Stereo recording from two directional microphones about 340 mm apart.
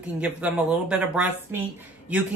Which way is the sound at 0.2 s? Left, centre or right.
Centre.